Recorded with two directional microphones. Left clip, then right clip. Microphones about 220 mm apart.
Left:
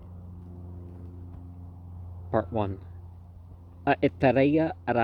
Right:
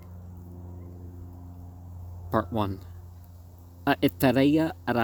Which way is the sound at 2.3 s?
40° right (ahead or behind).